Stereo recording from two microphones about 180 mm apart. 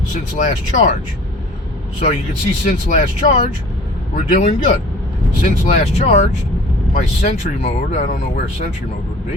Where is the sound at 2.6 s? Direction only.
40° left (ahead or behind).